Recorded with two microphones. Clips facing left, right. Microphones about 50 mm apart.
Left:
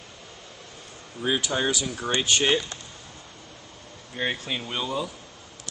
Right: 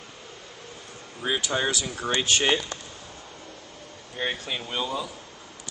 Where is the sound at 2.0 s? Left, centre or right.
Centre.